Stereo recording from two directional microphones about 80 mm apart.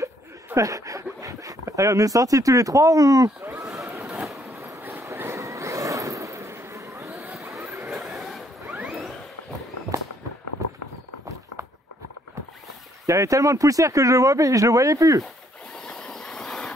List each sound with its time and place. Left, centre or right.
0.6 s speech: right
4.0 s a sound: centre
4.6 s train: right
5.0 s vehicle: right
7.9 s zipper: centre
10.6 s horse: right
13.0 s speech: right
15.9 s train: centre